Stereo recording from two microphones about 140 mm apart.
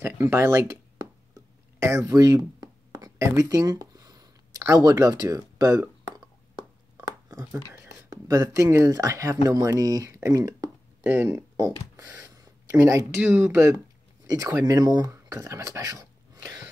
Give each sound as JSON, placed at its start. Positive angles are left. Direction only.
{"t": 0.0, "sound": "speech", "side_deg": -20}
{"t": 1.3, "sound": "a sound", "side_deg": -20}
{"t": 7.1, "sound": "speech", "side_deg": -25}
{"t": 12.0, "sound": "speech", "side_deg": -25}